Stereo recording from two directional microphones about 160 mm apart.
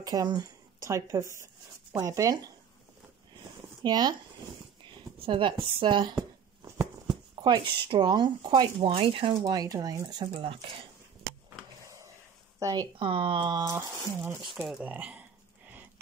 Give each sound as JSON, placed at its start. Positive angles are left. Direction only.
{"t": 0.0, "sound": "speech", "side_deg": -25}
{"t": 3.8, "sound": "speech", "side_deg": -25}
{"t": 4.8, "sound": "a sound", "side_deg": -30}
{"t": 7.4, "sound": "speech", "side_deg": -30}
{"t": 12.5, "sound": "speech", "side_deg": -20}
{"t": 12.9, "sound": "speech", "side_deg": -35}
{"t": 14.5, "sound": "speech", "side_deg": 0}